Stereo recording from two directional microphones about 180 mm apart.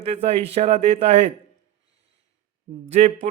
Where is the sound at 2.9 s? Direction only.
40° right (ahead or behind).